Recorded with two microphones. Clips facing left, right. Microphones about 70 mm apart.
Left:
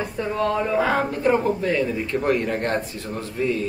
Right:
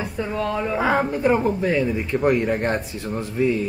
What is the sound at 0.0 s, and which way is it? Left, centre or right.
Speech, centre.